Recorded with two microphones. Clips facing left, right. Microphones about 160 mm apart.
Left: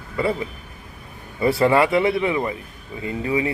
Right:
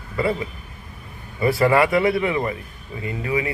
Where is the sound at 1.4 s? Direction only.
25° left (ahead or behind).